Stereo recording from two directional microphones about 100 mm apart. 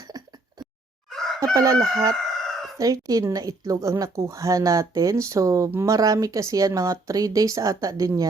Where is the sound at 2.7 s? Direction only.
35° right (ahead or behind).